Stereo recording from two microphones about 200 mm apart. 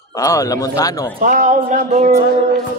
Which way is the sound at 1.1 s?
40° right (ahead or behind).